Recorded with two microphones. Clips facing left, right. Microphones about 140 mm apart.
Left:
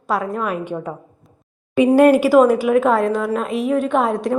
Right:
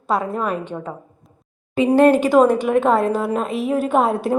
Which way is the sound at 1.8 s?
10° left (ahead or behind).